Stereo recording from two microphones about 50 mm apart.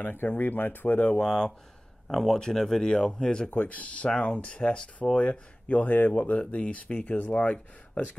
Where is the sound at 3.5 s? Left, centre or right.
Left.